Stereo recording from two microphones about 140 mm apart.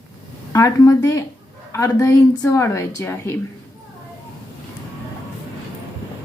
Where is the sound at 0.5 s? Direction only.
25° left (ahead or behind).